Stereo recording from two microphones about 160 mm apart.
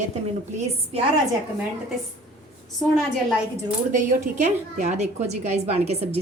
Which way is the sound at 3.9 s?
50° right (ahead or behind).